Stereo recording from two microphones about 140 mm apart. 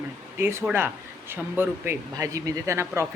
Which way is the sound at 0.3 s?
15° right (ahead or behind).